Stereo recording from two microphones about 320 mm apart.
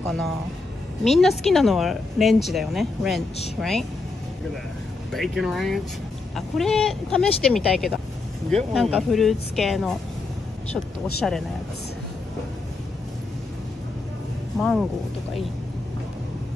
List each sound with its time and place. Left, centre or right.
1.0 s speech: centre
5.1 s speech: centre
11.2 s speech: centre
14.6 s speech: centre